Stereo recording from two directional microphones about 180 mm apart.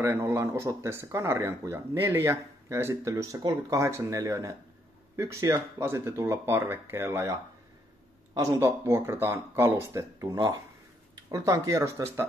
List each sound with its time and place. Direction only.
0.0 s speech: 15° right (ahead or behind)
8.4 s speech: 15° right (ahead or behind)